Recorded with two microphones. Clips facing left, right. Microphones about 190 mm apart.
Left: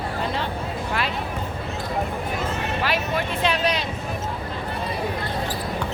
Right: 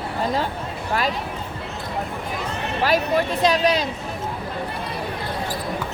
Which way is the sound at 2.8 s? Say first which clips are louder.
Right 7 dB; 40° right (ahead or behind).